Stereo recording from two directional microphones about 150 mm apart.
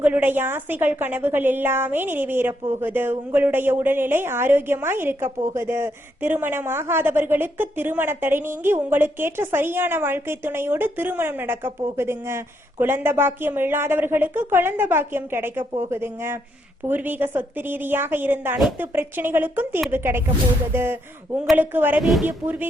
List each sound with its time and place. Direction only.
0.0 s speech: 10° right (ahead or behind)
22.0 s speech: centre (ahead or behind)
22.4 s speech: 10° right (ahead or behind)